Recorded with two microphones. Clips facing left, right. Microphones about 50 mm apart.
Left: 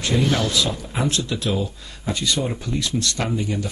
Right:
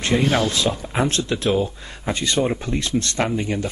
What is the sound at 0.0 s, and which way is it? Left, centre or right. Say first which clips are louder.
Speech: right 2 dB; right.